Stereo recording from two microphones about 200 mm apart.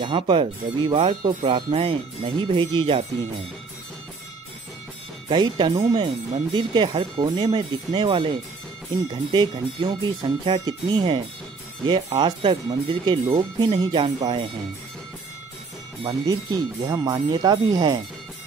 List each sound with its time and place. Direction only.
0.0 s speech: 25° right (ahead or behind)
5.3 s speech: 20° right (ahead or behind)
16.0 s speech: 25° right (ahead or behind)